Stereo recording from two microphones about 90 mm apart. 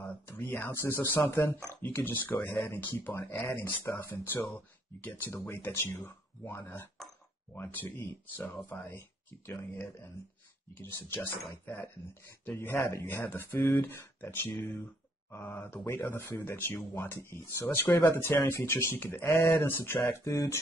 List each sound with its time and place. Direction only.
0.0 s speech: 20° left (ahead or behind)
11.6 s speech: 25° left (ahead or behind)
20.2 s speech: 35° left (ahead or behind)